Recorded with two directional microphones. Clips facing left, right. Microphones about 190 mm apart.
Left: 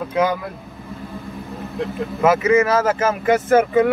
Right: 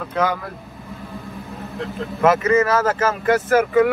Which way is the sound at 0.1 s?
15° left (ahead or behind).